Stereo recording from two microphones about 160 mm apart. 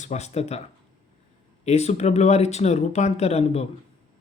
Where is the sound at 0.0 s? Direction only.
45° left (ahead or behind).